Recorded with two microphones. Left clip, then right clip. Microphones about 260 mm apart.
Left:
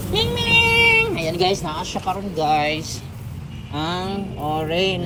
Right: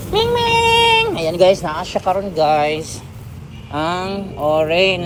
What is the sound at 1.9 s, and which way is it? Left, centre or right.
Speech, right.